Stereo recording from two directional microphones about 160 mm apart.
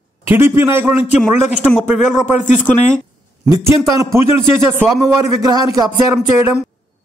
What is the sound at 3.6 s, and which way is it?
A man's voice, 20° right (ahead or behind).